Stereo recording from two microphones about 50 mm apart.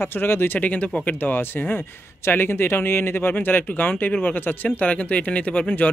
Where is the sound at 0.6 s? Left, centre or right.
Left.